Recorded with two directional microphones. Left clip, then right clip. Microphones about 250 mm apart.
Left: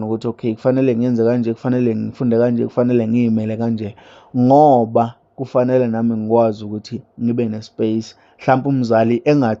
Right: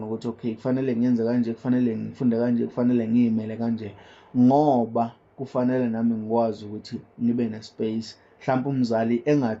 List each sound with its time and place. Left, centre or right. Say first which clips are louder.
0.0 s a man's voice: left 9 dB; left